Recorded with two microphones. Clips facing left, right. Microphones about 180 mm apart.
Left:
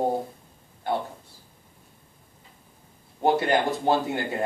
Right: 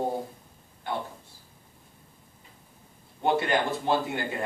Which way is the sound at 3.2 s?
35° left (ahead or behind).